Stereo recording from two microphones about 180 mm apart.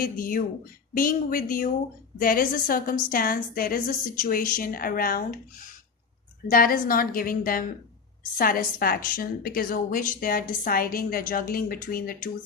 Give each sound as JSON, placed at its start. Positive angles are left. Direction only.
{"t": 0.0, "sound": "a woman's voice", "side_deg": 50}
{"t": 6.5, "sound": "a woman's voice", "side_deg": 50}